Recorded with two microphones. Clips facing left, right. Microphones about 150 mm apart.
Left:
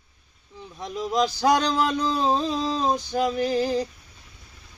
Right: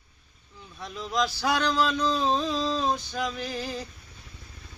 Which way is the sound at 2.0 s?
15° left (ahead or behind).